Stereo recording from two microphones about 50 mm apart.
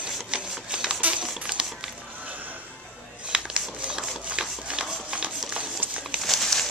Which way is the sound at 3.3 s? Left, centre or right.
Centre.